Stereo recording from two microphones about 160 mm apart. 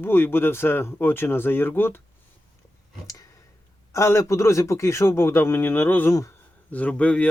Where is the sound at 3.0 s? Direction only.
20° left (ahead or behind).